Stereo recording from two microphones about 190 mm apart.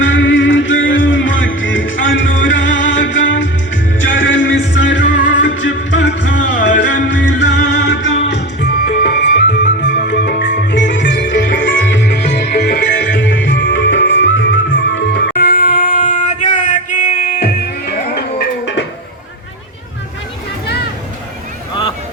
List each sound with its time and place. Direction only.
0.0 s music: 80° left
8.8 s music: 65° left (ahead or behind)